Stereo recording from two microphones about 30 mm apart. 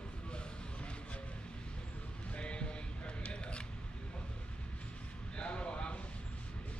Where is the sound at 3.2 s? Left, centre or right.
Left.